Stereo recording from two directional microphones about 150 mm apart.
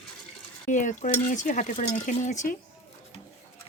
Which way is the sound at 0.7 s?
55° left (ahead or behind).